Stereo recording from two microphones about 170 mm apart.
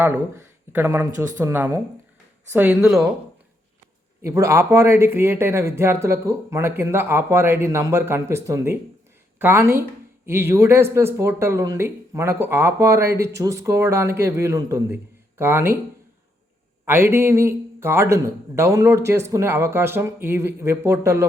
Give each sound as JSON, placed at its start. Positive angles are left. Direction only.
{"t": 0.0, "sound": "speech", "side_deg": -15}
{"t": 4.2, "sound": "speech", "side_deg": -15}
{"t": 16.8, "sound": "speech", "side_deg": -15}